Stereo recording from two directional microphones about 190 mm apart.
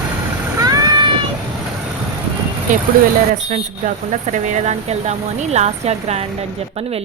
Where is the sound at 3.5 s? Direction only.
40° right (ahead or behind).